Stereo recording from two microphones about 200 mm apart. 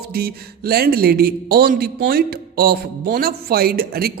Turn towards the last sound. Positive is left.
turn(degrees=-50)  # may be behind; listen again after turning